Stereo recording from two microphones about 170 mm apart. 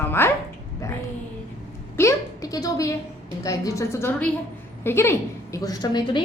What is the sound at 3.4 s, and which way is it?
A woman's voice, 20° left (ahead or behind).